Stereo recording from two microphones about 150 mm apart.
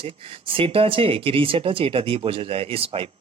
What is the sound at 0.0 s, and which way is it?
Speech, 40° right (ahead or behind).